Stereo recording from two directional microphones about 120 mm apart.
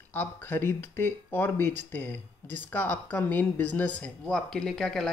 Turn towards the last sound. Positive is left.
turn(degrees=5)  # may be behind; listen again after turning